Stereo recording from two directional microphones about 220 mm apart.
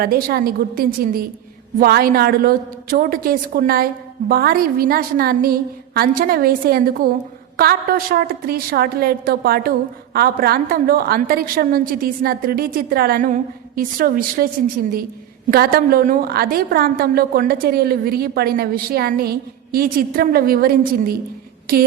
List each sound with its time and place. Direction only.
0.0 s a woman's voice: 45° right (ahead or behind)